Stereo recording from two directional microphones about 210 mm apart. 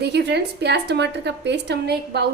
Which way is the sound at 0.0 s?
55° right (ahead or behind).